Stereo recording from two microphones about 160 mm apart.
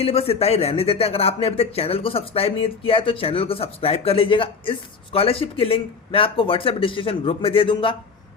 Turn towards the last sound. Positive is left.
turn(degrees=35)  # may be behind; listen again after turning